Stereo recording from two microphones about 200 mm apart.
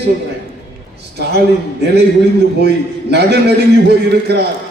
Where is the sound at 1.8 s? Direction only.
55° right (ahead or behind).